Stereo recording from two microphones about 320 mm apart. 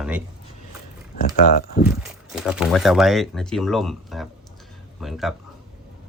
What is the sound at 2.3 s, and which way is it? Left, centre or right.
Speech, centre.